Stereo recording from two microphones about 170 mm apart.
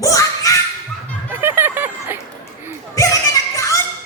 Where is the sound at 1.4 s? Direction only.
10° right (ahead or behind).